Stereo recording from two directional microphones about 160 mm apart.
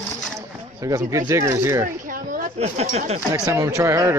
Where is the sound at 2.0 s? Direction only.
60° right (ahead or behind).